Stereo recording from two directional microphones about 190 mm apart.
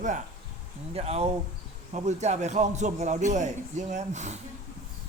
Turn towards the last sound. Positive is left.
turn(degrees=-35)  # may be behind; listen again after turning